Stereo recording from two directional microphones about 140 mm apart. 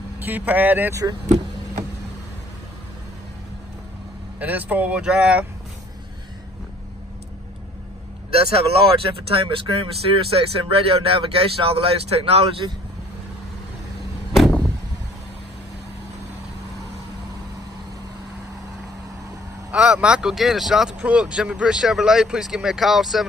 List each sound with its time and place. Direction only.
0.2 s speech: 10° right (ahead or behind)
4.4 s speech: 10° right (ahead or behind)
8.3 s speech: 45° right (ahead or behind)
19.7 s speech: 5° right (ahead or behind)